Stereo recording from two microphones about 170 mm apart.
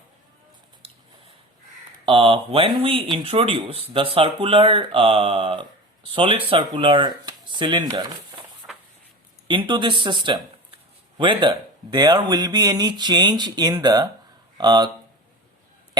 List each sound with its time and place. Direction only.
2.0 s speech: 30° right (ahead or behind)
8.6 s a sound: 15° right (ahead or behind)
9.5 s speech: 30° right (ahead or behind)